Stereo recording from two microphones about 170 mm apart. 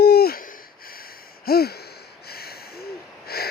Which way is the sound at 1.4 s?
65° left (ahead or behind).